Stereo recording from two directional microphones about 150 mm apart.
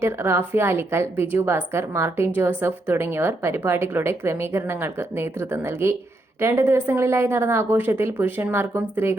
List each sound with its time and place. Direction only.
0.0 s a woman's voice: 15° right (ahead or behind)